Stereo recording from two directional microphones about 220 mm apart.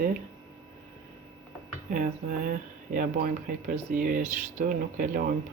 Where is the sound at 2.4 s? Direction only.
40° right (ahead or behind).